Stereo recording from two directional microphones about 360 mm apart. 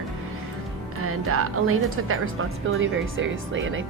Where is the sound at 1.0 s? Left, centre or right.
Right.